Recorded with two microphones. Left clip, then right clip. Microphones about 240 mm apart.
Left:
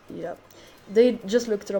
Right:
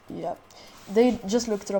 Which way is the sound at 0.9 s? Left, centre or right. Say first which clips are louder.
Left 2 dB; right.